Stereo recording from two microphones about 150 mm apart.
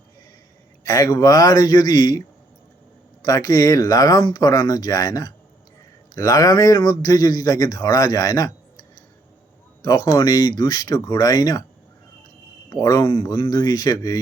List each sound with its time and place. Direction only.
0.9 s a man's voice: 25° left (ahead or behind)
3.2 s a man's voice: 25° left (ahead or behind)
9.8 s a man's voice: 25° left (ahead or behind)
12.7 s a man's voice: 25° left (ahead or behind)